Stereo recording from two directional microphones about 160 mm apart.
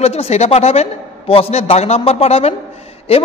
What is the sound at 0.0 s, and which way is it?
A man's voice, 40° left (ahead or behind).